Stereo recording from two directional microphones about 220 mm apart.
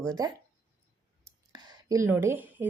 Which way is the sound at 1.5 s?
20° right (ahead or behind).